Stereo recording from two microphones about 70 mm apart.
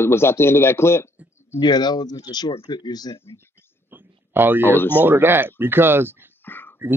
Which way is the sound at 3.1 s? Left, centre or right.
Left.